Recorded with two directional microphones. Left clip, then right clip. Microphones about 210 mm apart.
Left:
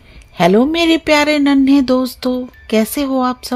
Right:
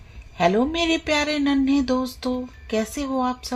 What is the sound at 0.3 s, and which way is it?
Speech, 55° left (ahead or behind).